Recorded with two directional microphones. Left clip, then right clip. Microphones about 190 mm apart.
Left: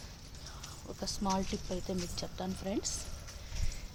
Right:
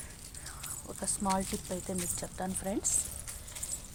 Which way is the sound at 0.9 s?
20° right (ahead or behind).